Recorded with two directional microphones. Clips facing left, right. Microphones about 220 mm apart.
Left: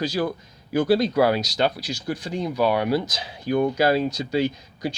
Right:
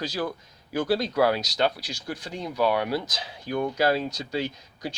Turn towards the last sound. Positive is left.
turn(degrees=10)  # may be behind; listen again after turning